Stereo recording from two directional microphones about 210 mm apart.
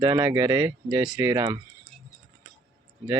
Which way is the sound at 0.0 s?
15° right (ahead or behind).